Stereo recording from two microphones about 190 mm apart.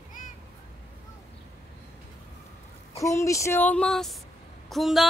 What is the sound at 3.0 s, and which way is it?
Speech, 15° left (ahead or behind).